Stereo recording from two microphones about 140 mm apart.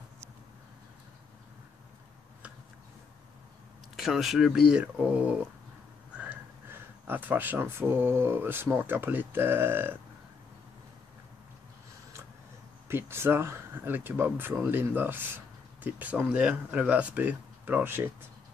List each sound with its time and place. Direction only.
3.9 s speech: 5° right (ahead or behind)
12.8 s speech: 15° right (ahead or behind)